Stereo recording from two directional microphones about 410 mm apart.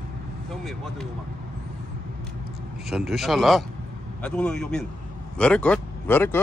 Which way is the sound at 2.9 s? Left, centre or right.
Centre.